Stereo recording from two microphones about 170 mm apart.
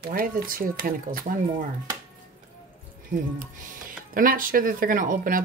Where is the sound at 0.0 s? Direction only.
55° right (ahead or behind).